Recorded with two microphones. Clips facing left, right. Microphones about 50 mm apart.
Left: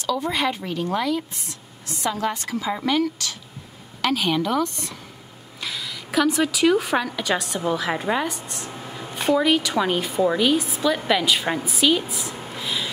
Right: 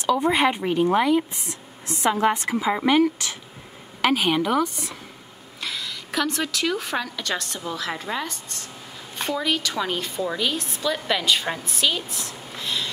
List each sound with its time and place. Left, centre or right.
0.0 s a woman's voice: right; by 9.1 s left
9.1 s a woman's voice: centre
12.5 s writing: centre